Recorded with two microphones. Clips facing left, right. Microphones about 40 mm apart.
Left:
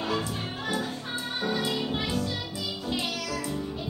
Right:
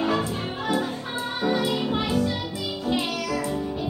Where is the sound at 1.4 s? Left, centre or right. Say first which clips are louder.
Right 5 dB; centre.